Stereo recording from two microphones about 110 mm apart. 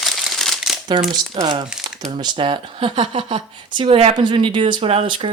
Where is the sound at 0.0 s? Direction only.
Centre (ahead or behind).